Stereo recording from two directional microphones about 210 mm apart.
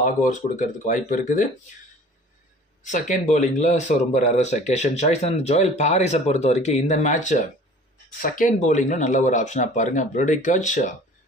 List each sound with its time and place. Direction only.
0.0 s speech: 40° left (ahead or behind)
2.8 s speech: 35° left (ahead or behind)